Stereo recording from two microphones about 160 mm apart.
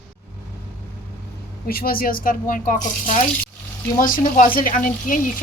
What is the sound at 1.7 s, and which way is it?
Speech, 65° left (ahead or behind).